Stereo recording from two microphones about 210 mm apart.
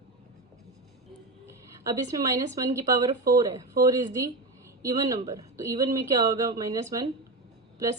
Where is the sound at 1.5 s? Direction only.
15° right (ahead or behind).